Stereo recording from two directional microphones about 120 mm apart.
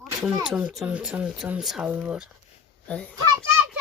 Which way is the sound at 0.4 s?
5° right (ahead or behind).